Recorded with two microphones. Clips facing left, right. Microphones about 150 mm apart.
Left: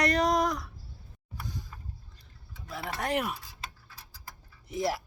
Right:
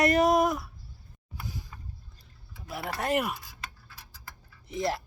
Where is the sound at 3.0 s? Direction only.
5° right (ahead or behind).